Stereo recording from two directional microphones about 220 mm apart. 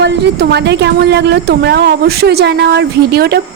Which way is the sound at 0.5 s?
50° right (ahead or behind).